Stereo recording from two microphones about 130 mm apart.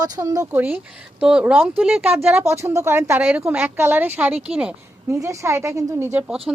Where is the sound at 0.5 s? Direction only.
15° right (ahead or behind).